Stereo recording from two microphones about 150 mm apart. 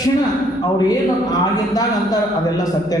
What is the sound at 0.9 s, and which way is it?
Speech, 25° left (ahead or behind).